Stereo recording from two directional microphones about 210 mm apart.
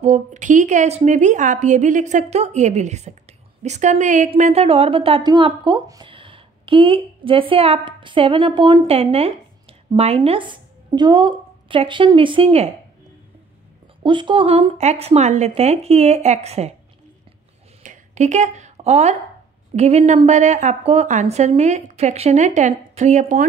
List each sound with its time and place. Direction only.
0.0 s a woman's voice: 35° right (ahead or behind)
14.0 s a woman's voice: 25° right (ahead or behind)
17.8 s a sound: 35° right (ahead or behind)
19.7 s a woman's voice: 30° right (ahead or behind)